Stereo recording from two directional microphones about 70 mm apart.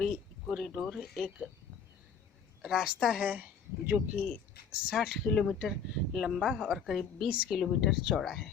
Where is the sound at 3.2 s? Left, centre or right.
Centre.